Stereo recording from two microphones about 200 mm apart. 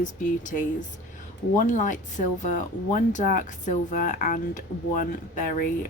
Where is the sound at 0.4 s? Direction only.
40° left (ahead or behind).